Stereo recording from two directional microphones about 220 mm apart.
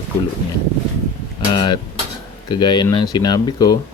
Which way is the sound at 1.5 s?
20° left (ahead or behind).